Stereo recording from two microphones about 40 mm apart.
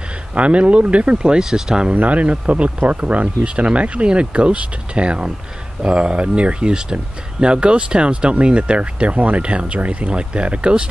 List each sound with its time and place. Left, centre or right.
0.3 s speech: right; by 1.9 s centre
2.0 s speech: right